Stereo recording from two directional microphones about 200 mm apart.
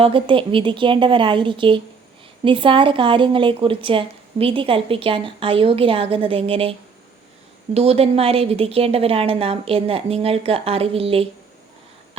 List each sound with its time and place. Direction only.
0.0 s a woman's voice: 25° right (ahead or behind)